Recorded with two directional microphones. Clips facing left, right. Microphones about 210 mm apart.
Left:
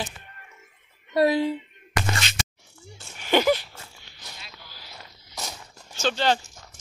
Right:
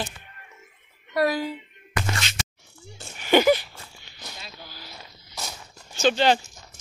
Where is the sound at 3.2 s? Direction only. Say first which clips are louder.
Right 3 dB; 5° right (ahead or behind).